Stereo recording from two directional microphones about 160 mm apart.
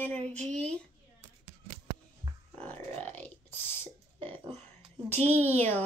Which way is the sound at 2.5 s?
10° left (ahead or behind).